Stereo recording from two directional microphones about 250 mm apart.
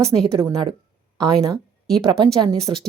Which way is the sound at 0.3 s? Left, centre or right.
Centre.